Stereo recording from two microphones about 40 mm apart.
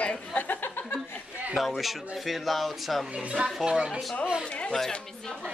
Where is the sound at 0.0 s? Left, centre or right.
Left.